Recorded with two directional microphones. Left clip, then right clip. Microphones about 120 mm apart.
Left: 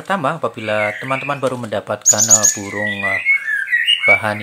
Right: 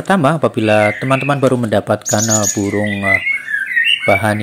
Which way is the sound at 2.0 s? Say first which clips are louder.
Left 2 dB; 25° right (ahead or behind).